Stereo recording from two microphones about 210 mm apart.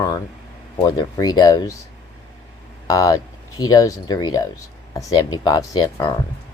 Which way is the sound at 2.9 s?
15° left (ahead or behind).